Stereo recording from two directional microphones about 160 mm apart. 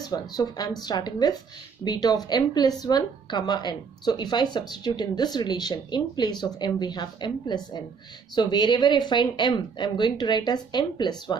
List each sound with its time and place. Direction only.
0.0 s a woman's voice: 25° left (ahead or behind)